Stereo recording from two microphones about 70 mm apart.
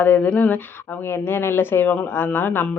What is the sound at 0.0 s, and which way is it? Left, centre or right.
Speech, left.